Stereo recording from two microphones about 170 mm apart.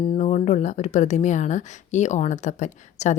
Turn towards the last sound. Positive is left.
turn(degrees=45)  # may be behind; listen again after turning